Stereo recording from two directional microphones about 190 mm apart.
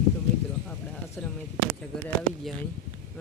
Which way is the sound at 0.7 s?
5° left (ahead or behind).